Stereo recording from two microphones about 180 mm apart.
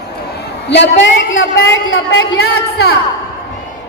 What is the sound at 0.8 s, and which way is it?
Speech, 90° left.